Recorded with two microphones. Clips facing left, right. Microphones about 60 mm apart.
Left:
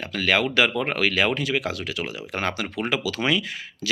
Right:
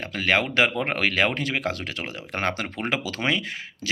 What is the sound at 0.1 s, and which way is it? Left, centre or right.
Speech, right.